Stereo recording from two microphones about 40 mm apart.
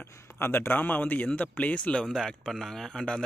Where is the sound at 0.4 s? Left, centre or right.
Left.